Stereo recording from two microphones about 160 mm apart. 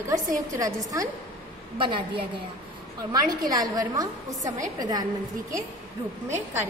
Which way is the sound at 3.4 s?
25° right (ahead or behind).